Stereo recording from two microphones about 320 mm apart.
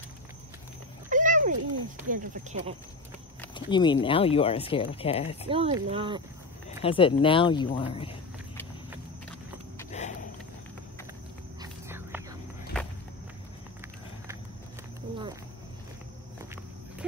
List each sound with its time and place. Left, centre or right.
1.1 s a sound: right
2.0 s speech: right
3.3 s speech: centre
5.5 s speech: centre
6.8 s speech: centre
9.8 s a sound: left
11.6 s walk: centre